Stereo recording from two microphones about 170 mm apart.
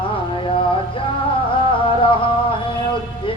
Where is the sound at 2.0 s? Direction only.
30° left (ahead or behind).